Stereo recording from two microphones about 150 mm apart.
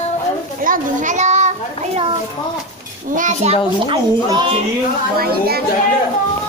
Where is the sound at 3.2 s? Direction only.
55° right (ahead or behind).